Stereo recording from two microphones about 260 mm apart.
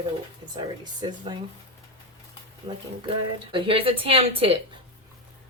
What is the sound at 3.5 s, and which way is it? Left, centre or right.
Speech, right.